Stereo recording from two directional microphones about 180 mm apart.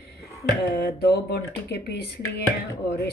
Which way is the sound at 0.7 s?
65° left (ahead or behind).